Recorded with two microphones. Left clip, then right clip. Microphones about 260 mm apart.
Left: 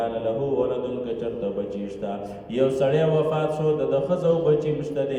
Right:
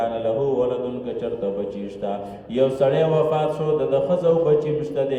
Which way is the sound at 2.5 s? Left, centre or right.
Centre.